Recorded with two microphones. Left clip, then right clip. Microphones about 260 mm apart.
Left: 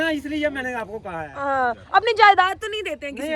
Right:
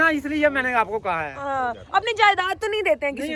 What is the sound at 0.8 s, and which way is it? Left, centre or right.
Speech, right.